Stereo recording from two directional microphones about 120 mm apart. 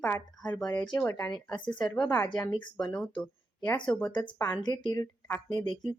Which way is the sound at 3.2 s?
15° left (ahead or behind).